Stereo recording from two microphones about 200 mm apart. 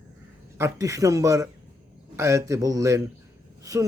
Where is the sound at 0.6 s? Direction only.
15° right (ahead or behind).